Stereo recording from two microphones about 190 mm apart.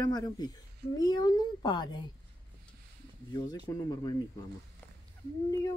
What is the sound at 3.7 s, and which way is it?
Speech, 20° left (ahead or behind).